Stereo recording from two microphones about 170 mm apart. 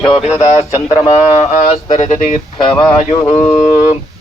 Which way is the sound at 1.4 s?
45° left (ahead or behind).